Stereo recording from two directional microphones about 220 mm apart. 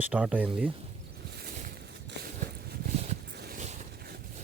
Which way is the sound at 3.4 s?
45° right (ahead or behind).